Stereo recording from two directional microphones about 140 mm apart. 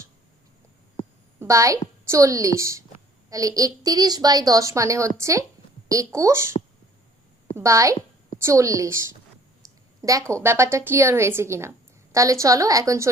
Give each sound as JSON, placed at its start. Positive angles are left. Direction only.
{"t": 1.4, "sound": "a woman's voice", "side_deg": -20}
{"t": 7.5, "sound": "a woman's voice", "side_deg": -20}
{"t": 9.6, "sound": "a sound", "side_deg": -25}
{"t": 10.0, "sound": "a woman's voice", "side_deg": -25}